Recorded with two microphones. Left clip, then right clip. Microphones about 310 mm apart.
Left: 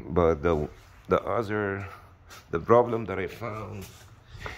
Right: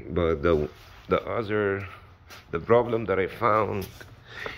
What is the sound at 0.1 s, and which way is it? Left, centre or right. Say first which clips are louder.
Speech: even; centre.